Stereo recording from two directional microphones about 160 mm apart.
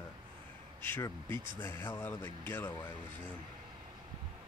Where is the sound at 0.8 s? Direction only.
15° left (ahead or behind).